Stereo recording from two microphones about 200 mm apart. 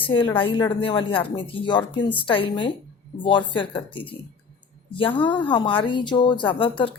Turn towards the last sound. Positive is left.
turn(degrees=25)  # may be behind; listen again after turning